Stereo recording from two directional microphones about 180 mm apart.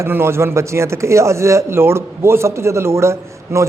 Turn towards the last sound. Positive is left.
turn(degrees=-15)  # may be behind; listen again after turning